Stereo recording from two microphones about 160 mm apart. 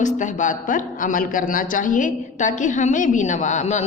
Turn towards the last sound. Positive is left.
turn(degrees=45)  # may be behind; listen again after turning